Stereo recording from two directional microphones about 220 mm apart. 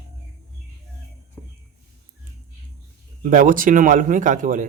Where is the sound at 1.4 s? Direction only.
10° left (ahead or behind).